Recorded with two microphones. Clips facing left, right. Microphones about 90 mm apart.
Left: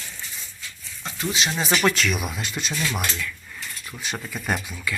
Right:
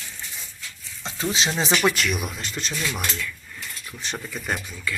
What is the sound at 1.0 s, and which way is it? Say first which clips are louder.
Speech: right 1 dB; 30° right (ahead or behind).